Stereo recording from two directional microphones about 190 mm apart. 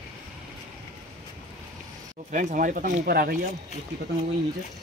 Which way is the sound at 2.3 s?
45° right (ahead or behind).